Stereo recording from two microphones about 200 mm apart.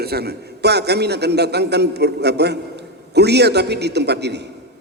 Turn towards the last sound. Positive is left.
turn(degrees=-60)  # may be behind; listen again after turning